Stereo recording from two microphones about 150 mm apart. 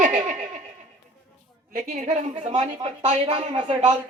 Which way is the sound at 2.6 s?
50° right (ahead or behind).